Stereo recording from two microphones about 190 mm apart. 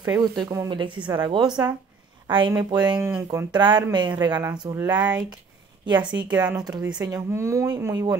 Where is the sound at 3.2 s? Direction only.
20° right (ahead or behind).